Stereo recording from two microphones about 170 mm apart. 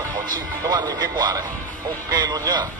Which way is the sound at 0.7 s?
25° right (ahead or behind).